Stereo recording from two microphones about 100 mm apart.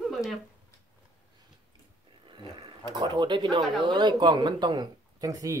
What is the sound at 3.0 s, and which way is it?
Speech, 50° right (ahead or behind).